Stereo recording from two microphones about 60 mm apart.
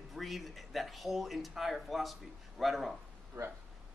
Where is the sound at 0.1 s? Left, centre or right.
Centre.